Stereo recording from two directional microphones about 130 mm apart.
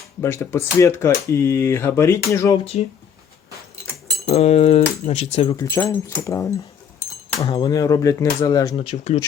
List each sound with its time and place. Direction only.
0.2 s speech: 20° left (ahead or behind)
4.3 s speech: 55° left (ahead or behind)
5.6 s speech: 15° left (ahead or behind)
8.7 s speech: 45° left (ahead or behind)